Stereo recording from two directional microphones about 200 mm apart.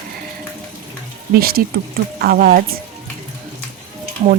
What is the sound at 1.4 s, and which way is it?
A woman's voice, 50° right (ahead or behind).